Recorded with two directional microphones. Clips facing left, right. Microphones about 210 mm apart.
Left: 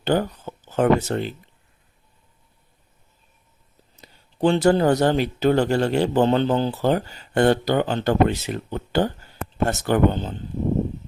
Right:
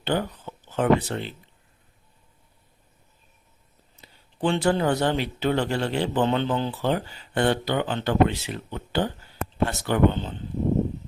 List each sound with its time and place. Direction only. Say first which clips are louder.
0.0 s speech: left 5 dB; 45° left (ahead or behind)
3.9 s speech: left 4 dB; 40° left (ahead or behind)